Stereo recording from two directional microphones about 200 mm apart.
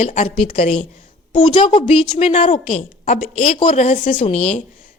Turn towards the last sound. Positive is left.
turn(degrees=35)  # may be behind; listen again after turning